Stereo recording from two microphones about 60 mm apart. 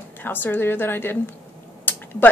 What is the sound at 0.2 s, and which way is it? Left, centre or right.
A woman's voice, left.